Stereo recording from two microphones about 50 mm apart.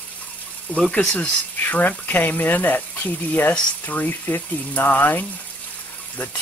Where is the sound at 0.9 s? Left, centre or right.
Left.